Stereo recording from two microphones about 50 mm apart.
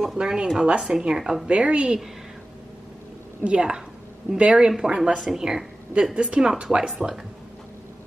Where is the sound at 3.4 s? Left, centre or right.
Right.